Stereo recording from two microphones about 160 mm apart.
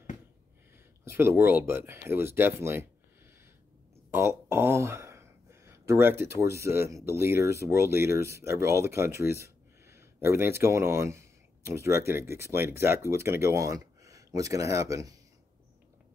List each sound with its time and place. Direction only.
1.0 s speech: 15° right (ahead or behind)
4.1 s a sound: 15° right (ahead or behind)
7.1 s speech: 15° right (ahead or behind)